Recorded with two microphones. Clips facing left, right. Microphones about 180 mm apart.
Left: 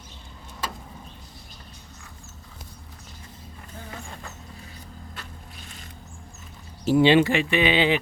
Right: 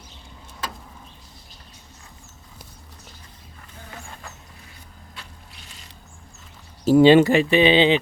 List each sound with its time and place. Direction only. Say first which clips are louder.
6.8 s speech: right 5 dB; 40° right (ahead or behind)